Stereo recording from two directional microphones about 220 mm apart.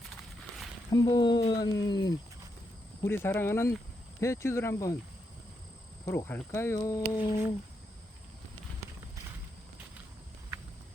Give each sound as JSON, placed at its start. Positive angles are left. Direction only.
{"t": 0.1, "sound": "a sound", "side_deg": 0}
{"t": 0.9, "sound": "speech", "side_deg": 15}
{"t": 6.1, "sound": "speech", "side_deg": 10}